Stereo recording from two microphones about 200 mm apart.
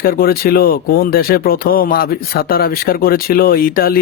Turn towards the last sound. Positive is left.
turn(degrees=45)  # may be behind; listen again after turning